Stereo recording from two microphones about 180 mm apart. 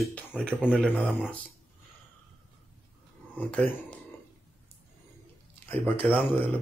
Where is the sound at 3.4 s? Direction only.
5° left (ahead or behind).